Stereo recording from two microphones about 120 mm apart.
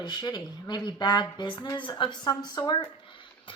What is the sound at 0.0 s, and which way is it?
Speech, 40° left (ahead or behind).